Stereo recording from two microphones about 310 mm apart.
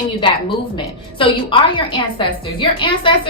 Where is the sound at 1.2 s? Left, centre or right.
Centre.